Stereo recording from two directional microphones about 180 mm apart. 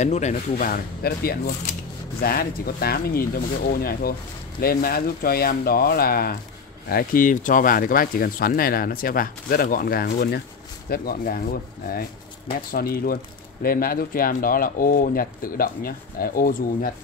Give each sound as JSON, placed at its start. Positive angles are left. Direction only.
{"t": 0.0, "sound": "speech", "side_deg": 40}